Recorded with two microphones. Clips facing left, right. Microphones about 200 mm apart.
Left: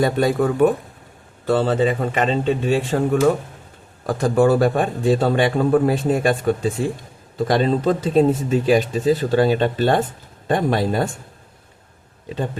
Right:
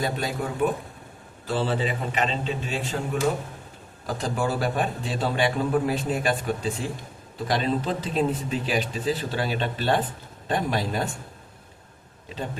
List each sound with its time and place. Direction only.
0.0 s a man's voice: 55° left (ahead or behind)
1.5 s a man's voice: 45° left (ahead or behind)
4.0 s a man's voice: 60° left (ahead or behind)